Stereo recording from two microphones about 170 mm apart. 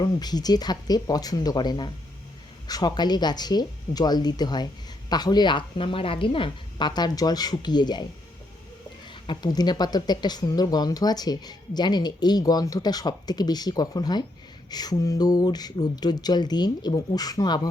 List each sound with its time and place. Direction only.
0.0 s speech: 25° left (ahead or behind)
9.2 s speech: 25° left (ahead or behind)